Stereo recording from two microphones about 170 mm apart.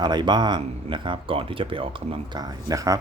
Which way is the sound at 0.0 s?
25° right (ahead or behind).